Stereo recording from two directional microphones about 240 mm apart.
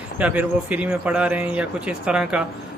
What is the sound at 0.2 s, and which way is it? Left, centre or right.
A man's voice, centre.